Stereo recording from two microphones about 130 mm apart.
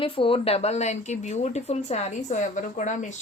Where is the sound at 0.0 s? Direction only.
45° left (ahead or behind).